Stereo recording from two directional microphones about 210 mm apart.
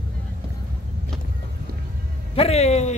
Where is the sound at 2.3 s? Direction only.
30° left (ahead or behind).